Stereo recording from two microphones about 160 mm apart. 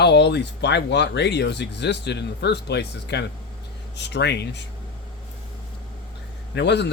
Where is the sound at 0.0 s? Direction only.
90° left.